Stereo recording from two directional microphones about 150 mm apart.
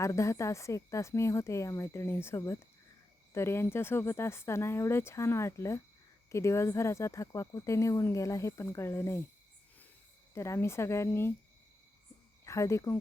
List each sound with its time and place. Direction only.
0.0 s speech: 20° left (ahead or behind)
10.3 s speech: 20° left (ahead or behind)
12.5 s speech: 20° left (ahead or behind)